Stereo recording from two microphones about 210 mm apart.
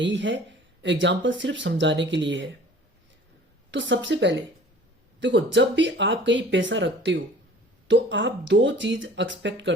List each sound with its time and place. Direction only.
0.0 s speech: 60° right (ahead or behind)
3.7 s speech: 60° right (ahead or behind)